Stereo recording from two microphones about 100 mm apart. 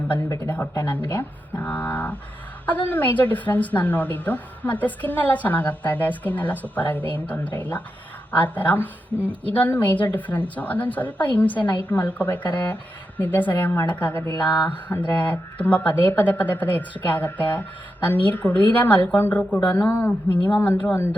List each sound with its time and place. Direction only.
0.3 s a woman's voice: 25° left (ahead or behind)